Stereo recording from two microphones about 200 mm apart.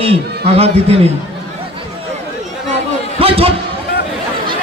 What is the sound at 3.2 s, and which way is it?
Speech, 30° right (ahead or behind).